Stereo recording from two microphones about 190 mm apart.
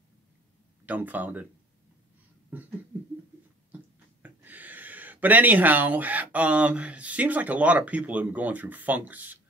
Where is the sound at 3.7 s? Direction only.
10° right (ahead or behind).